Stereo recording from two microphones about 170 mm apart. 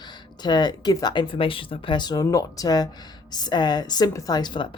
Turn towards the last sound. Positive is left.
turn(degrees=25)  # may be behind; listen again after turning